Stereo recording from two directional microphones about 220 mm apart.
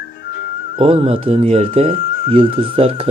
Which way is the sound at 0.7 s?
25° right (ahead or behind).